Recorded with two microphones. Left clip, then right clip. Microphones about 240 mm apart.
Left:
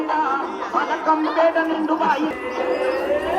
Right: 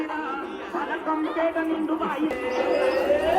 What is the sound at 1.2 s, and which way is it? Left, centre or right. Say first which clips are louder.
Music: left 7 dB; left.